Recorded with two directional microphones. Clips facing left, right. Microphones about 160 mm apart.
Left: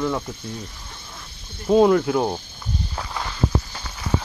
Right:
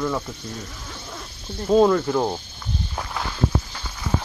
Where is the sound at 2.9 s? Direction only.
Centre (ahead or behind).